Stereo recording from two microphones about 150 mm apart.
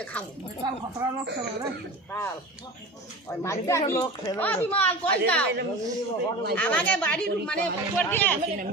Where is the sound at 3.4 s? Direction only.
20° left (ahead or behind).